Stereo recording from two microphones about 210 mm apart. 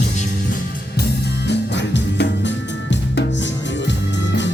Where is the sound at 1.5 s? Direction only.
55° left (ahead or behind).